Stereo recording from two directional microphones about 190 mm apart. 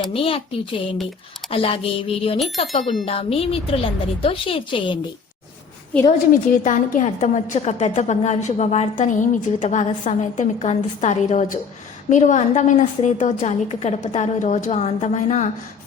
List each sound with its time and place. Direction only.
0.1 s a woman's voice: 30° left (ahead or behind)
2.8 s speech: centre (ahead or behind)
3.1 s a woman's voice: 30° left (ahead or behind)
6.1 s a woman's voice: 45° left (ahead or behind)